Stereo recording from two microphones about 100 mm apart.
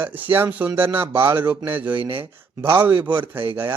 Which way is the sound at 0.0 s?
20° right (ahead or behind).